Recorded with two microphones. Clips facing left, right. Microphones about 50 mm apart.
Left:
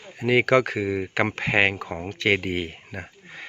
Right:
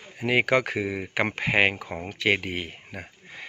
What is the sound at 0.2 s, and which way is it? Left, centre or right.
Speech, centre.